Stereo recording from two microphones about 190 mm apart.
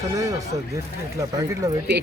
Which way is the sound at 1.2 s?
15° right (ahead or behind).